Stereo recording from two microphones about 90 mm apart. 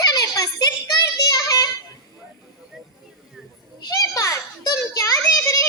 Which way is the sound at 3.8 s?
45° left (ahead or behind).